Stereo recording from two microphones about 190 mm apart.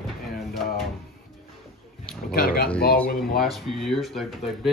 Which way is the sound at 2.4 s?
50° left (ahead or behind).